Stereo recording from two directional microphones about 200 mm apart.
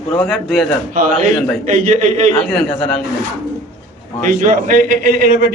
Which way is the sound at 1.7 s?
40° right (ahead or behind).